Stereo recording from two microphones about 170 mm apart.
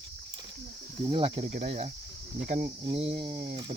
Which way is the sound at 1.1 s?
30° right (ahead or behind).